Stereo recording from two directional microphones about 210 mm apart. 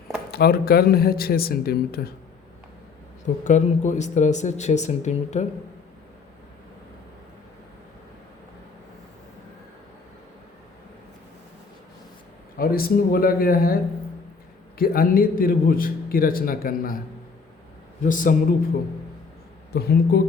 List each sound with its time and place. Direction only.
0.3 s a man's voice: 50° left (ahead or behind)
3.4 s speech: 35° left (ahead or behind)
12.5 s a man's voice: 45° left (ahead or behind)
14.8 s a man's voice: 45° left (ahead or behind)
18.0 s speech: 40° left (ahead or behind)
19.7 s a man's voice: 50° left (ahead or behind)